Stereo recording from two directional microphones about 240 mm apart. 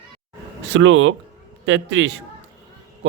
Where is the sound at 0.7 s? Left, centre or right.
Right.